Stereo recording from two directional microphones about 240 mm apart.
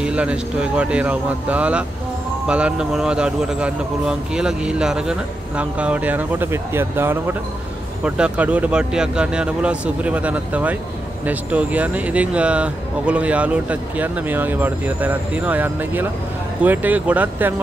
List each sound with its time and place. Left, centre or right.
0.0 s speech: centre